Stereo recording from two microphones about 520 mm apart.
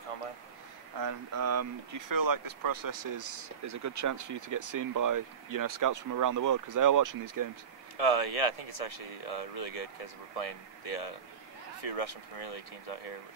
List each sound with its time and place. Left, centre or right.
0.9 s speech: right
8.1 s speech: left